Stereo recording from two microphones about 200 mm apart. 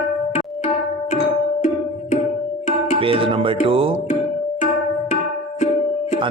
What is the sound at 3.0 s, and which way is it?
Music, 25° right (ahead or behind).